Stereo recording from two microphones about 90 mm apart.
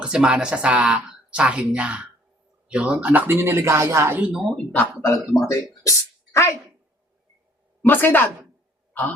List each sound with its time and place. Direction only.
0.0 s speech: 10° right (ahead or behind); by 4.1 s 35° right (ahead or behind)
4.3 s speech: 5° right (ahead or behind)
4.5 s speech: 20° left (ahead or behind)
5.3 s speech: 35° left (ahead or behind)
7.8 s a woman's voice: 20° left (ahead or behind)
8.9 s a sound: 15° left (ahead or behind)